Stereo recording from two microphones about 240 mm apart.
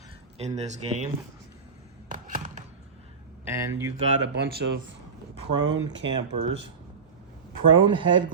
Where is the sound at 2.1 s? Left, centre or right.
Right.